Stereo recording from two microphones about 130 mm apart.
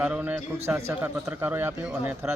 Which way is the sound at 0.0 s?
10° right (ahead or behind).